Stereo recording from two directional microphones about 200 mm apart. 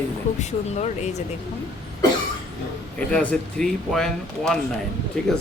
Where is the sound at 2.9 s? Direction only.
5° left (ahead or behind).